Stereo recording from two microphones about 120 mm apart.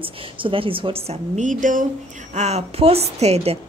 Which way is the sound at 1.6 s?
90° right.